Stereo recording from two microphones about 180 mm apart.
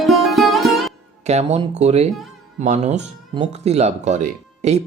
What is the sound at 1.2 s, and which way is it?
Speech, 35° right (ahead or behind).